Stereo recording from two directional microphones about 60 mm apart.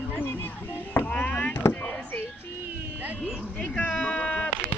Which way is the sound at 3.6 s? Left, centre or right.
Left.